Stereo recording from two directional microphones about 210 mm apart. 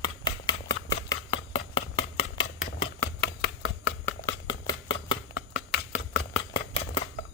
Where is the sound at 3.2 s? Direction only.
55° left (ahead or behind).